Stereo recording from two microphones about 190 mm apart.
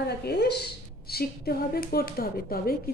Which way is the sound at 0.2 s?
60° left (ahead or behind).